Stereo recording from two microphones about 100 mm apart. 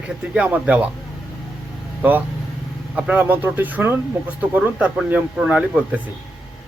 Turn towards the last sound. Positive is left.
turn(degrees=-10)  # may be behind; listen again after turning